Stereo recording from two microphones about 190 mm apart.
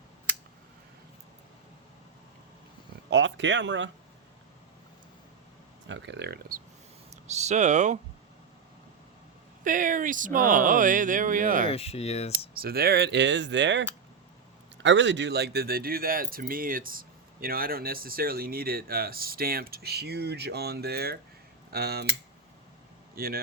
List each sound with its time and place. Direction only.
3.1 s speech: 65° right (ahead or behind)
5.9 s speech: 70° right (ahead or behind)
7.1 s speech: 35° right (ahead or behind)
9.6 s speech: 45° right (ahead or behind)
11.7 s speech: 30° left (ahead or behind)
12.5 s speech: 55° right (ahead or behind)
23.1 s a man's voice: 50° right (ahead or behind)